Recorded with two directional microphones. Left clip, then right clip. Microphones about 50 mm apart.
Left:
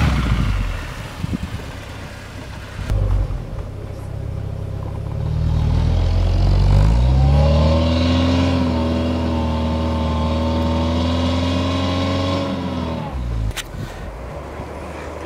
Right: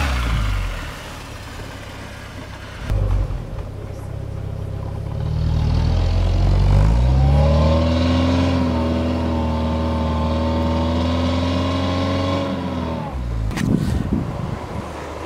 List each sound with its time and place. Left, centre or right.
0.0 s vehicle: right
5.8 s vehicle: centre
7.3 s vehicle: centre